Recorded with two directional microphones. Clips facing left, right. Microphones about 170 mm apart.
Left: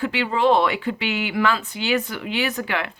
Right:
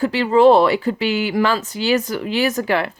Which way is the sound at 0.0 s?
40° right (ahead or behind).